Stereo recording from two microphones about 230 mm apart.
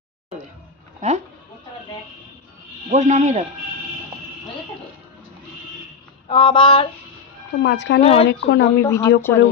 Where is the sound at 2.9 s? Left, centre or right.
Right.